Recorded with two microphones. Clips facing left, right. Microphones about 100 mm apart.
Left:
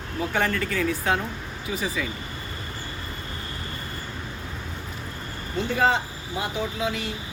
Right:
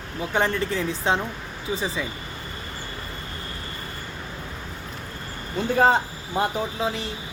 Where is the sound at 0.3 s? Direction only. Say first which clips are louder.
Right 2 dB; 20° right (ahead or behind).